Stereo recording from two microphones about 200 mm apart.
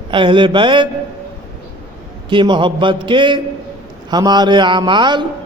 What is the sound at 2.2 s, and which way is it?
A man's voice, 25° right (ahead or behind).